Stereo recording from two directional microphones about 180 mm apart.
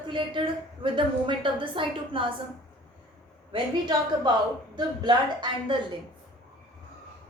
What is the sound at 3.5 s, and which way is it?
Speech, 25° right (ahead or behind).